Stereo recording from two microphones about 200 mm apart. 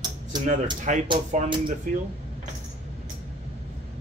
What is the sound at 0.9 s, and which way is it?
Speech, 40° right (ahead or behind).